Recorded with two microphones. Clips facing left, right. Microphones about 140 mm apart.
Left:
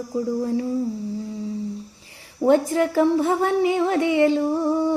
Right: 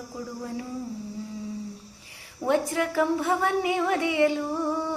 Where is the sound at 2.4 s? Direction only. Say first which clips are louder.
Left 7 dB; 30° left (ahead or behind).